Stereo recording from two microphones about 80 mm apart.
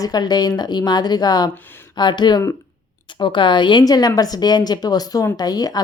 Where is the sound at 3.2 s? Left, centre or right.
Left.